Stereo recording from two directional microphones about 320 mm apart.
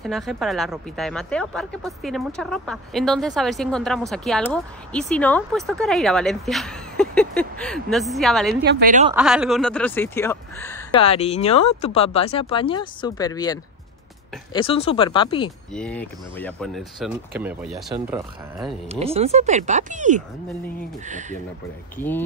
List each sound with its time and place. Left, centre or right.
0.0 s speech: centre
8.5 s speech: right
9.1 s speech: centre
15.7 s speech: centre
19.1 s speech: centre
21.9 s speech: centre